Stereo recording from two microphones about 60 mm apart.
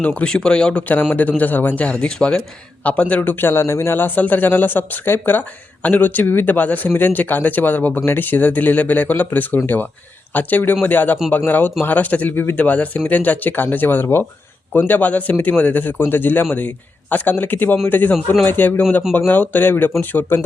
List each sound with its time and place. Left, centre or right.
0.0 s a man's voice: centre
3.2 s a man's voice: left